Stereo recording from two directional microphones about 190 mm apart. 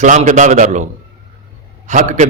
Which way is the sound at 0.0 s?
40° right (ahead or behind).